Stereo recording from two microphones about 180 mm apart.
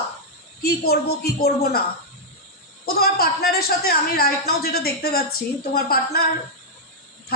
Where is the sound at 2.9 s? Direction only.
60° left (ahead or behind).